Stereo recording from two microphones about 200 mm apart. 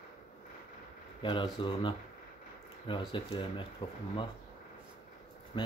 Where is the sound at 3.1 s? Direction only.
25° left (ahead or behind).